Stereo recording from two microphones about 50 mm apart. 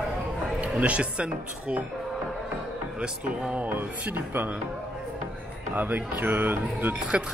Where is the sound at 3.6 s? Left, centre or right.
Right.